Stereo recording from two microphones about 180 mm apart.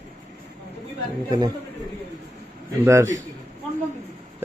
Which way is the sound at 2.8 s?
15° right (ahead or behind).